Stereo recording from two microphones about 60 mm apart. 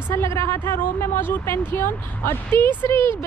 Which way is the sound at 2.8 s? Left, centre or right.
Left.